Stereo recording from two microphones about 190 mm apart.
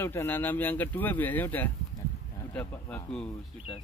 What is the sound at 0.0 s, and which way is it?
Speech, 10° left (ahead or behind).